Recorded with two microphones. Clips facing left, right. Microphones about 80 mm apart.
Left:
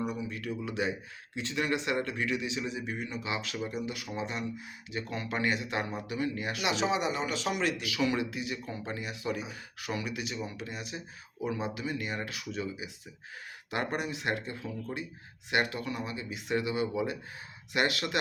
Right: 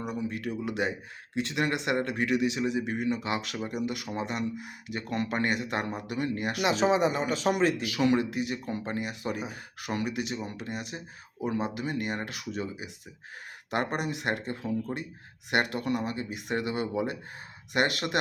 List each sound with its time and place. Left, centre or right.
0.1 s a man's voice: right
15.4 s speech: right